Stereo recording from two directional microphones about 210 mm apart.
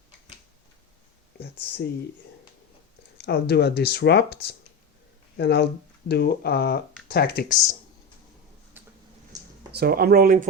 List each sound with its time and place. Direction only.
1.4 s speech: 50° left (ahead or behind)
3.2 s speech: 50° left (ahead or behind)
8.8 s a sound: 10° right (ahead or behind)
9.7 s speech: 45° right (ahead or behind)